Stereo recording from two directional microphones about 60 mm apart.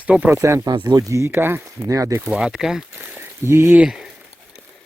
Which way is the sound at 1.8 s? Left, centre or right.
Right.